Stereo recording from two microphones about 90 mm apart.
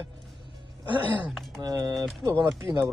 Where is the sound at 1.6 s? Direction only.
45° right (ahead or behind).